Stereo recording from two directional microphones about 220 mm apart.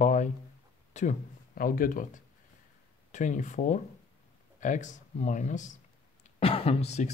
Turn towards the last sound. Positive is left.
turn(degrees=30)  # may be behind; listen again after turning